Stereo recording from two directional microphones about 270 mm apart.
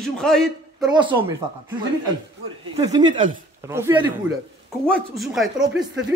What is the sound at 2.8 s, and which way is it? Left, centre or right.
Speech, centre.